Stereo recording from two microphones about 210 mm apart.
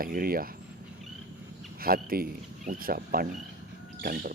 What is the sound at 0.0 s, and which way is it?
Speech, 45° right (ahead or behind).